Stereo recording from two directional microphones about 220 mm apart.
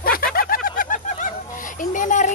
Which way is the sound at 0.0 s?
40° left (ahead or behind).